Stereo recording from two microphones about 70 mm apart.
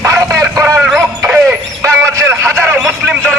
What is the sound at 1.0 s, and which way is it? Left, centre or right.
Speech, right.